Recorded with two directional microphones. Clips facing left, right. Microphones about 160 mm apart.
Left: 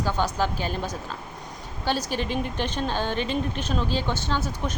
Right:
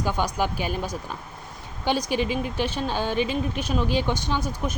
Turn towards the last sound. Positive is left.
turn(degrees=-15)  # may be behind; listen again after turning